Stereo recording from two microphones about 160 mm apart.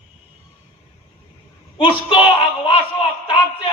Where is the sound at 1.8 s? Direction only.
35° left (ahead or behind).